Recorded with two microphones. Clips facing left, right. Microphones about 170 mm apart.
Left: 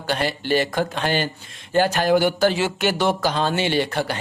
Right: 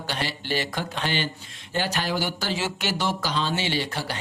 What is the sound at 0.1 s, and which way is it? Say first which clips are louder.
Speech: left 8 dB; 50° left (ahead or behind).